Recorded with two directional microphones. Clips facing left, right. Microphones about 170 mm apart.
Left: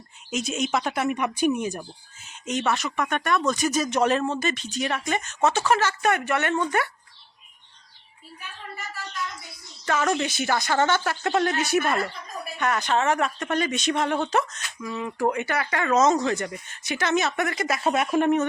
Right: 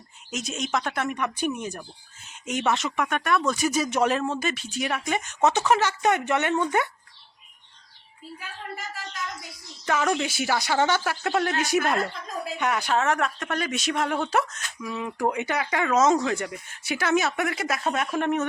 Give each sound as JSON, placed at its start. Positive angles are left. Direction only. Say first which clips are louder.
{"t": 0.3, "sound": "speech", "louder": "left 3 dB", "side_deg": 0}
{"t": 2.5, "sound": "speech", "louder": "even", "side_deg": -10}
{"t": 9.8, "sound": "speech", "louder": "even", "side_deg": -10}
{"t": 17.7, "sound": "speech", "louder": "left 8 dB", "side_deg": 5}